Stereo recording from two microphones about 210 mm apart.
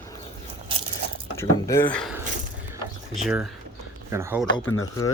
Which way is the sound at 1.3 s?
15° left (ahead or behind).